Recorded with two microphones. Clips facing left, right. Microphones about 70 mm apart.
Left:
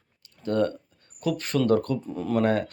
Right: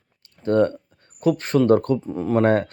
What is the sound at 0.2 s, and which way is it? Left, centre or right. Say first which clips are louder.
Speech: right 6 dB; right.